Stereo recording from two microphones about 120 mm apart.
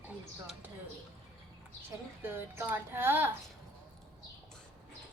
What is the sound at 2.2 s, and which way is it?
A woman's voice, 20° right (ahead or behind).